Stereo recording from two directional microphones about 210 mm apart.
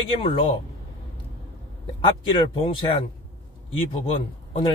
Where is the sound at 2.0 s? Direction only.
25° left (ahead or behind).